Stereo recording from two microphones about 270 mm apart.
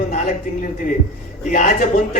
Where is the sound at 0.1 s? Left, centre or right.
Left.